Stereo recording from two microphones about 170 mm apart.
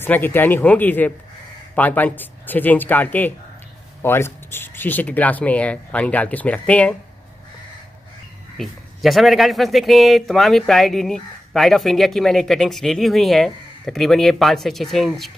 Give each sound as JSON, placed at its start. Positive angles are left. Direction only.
{"t": 0.0, "sound": "speech", "side_deg": 10}
{"t": 8.5, "sound": "speech", "side_deg": 0}